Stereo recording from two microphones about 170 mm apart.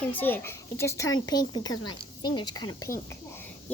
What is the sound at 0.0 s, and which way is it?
A child's voice, 10° left (ahead or behind).